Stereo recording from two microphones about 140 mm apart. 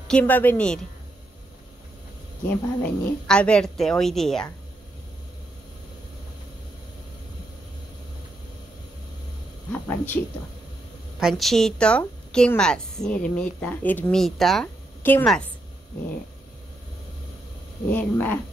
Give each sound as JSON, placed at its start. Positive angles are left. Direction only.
{"t": 0.1, "sound": "a woman's voice", "side_deg": 10}
{"t": 2.4, "sound": "speech", "side_deg": 10}
{"t": 9.7, "sound": "speech", "side_deg": 10}
{"t": 11.1, "sound": "a woman's voice", "side_deg": 0}
{"t": 14.2, "sound": "speech", "side_deg": 0}
{"t": 15.0, "sound": "a woman's voice", "side_deg": 15}
{"t": 17.8, "sound": "a woman's voice", "side_deg": 15}